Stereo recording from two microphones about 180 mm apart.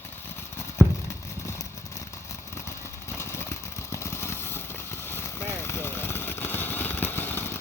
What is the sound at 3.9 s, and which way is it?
Vehicle, 15° left (ahead or behind).